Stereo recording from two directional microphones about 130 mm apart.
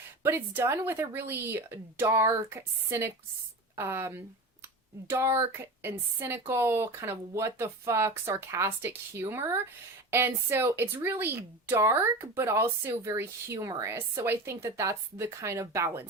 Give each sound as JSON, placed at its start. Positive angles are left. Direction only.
{"t": 0.2, "sound": "speech", "side_deg": -20}